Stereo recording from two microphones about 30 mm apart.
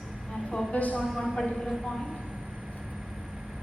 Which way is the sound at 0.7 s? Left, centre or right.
Left.